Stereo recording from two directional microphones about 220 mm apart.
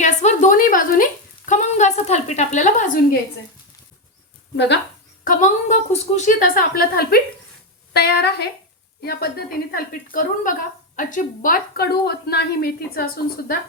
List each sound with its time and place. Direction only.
0.0 s a sound: 35° left (ahead or behind)
4.5 s speech: 50° left (ahead or behind)
5.2 s speech: 35° left (ahead or behind)